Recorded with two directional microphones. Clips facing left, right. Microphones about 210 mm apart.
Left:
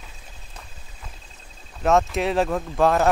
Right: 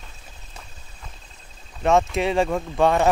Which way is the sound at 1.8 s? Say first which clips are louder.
Right 1 dB; centre (ahead or behind).